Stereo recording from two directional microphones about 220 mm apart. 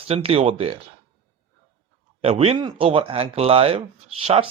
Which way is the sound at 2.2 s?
30° right (ahead or behind).